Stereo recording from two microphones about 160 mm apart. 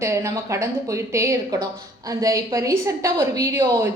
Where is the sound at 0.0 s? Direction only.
20° right (ahead or behind).